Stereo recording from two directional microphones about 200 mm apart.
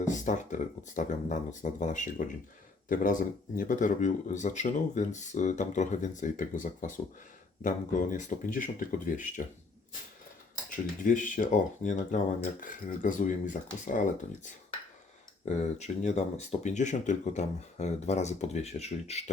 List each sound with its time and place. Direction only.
0.0 s speech: 40° left (ahead or behind)
10.7 s speech: 40° left (ahead or behind)